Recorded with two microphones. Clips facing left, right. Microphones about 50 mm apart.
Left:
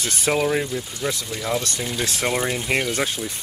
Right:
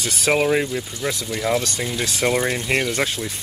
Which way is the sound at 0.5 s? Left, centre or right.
Right.